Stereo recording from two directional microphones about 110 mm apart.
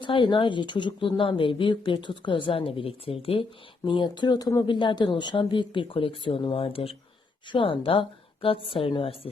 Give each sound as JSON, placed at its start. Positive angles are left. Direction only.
{"t": 0.0, "sound": "speech", "side_deg": 50}
{"t": 3.8, "sound": "a woman's voice", "side_deg": 45}